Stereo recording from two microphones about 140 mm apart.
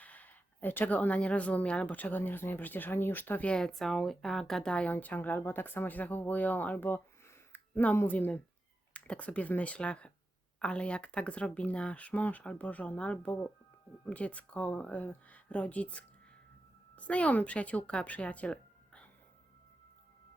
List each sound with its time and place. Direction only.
0.0 s speech: 10° left (ahead or behind)